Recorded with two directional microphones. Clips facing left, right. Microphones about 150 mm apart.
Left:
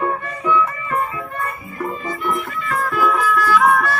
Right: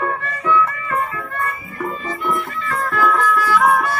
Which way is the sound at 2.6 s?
10° left (ahead or behind).